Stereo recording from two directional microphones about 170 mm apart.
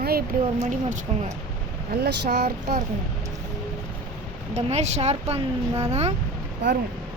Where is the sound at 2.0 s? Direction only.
75° right (ahead or behind).